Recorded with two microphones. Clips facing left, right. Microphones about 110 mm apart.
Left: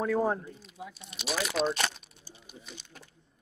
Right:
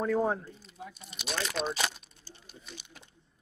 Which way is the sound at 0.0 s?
Centre (ahead or behind).